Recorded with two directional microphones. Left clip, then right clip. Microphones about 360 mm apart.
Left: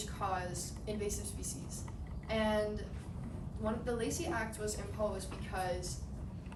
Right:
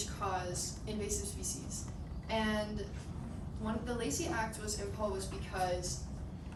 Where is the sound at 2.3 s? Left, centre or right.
Centre.